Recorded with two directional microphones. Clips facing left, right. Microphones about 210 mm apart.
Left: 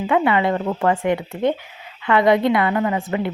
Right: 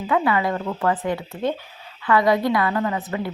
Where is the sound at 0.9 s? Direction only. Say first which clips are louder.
Left 5 dB; 15° left (ahead or behind).